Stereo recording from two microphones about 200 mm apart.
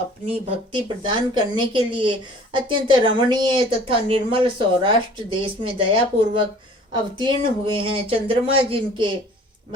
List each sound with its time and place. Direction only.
0.3 s a woman's voice: 25° right (ahead or behind)